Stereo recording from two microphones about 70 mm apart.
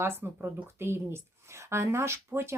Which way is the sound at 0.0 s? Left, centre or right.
Right.